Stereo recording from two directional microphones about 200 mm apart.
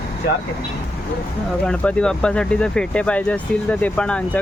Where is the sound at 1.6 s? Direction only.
5° left (ahead or behind).